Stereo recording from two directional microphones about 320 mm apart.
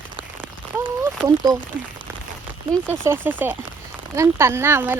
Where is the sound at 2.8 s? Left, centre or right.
Centre.